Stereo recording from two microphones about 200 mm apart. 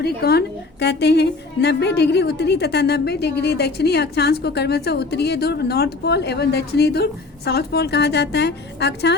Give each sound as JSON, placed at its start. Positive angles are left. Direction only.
{"t": 0.0, "sound": "a woman's voice", "side_deg": 50}